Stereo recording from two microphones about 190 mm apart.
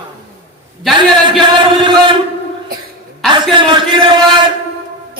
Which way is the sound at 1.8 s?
25° right (ahead or behind).